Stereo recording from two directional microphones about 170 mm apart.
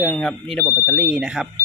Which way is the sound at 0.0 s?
5° left (ahead or behind).